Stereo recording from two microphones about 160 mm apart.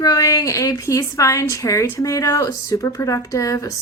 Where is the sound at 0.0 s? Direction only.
20° left (ahead or behind).